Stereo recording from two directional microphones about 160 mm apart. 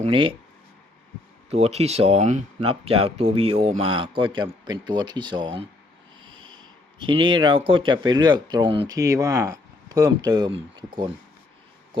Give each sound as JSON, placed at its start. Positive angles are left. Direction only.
{"t": 0.0, "sound": "speech", "side_deg": -35}
{"t": 1.5, "sound": "speech", "side_deg": -40}
{"t": 7.0, "sound": "speech", "side_deg": -30}